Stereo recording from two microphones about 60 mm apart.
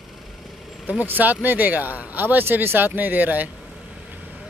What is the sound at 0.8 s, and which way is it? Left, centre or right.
Speech, right.